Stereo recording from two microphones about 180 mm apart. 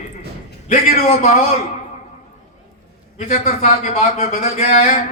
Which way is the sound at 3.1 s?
45° left (ahead or behind).